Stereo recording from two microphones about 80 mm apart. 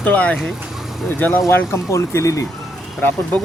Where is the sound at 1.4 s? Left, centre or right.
Left.